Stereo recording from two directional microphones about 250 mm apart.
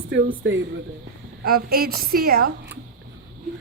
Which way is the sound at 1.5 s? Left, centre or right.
Right.